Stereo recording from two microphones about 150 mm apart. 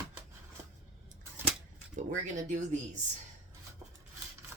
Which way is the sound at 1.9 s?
55° right (ahead or behind).